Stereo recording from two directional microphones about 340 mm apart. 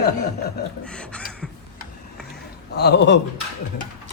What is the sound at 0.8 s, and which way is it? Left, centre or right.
Speech, centre.